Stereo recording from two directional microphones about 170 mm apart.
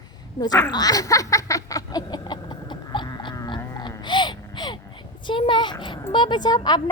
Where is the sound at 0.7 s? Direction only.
20° left (ahead or behind).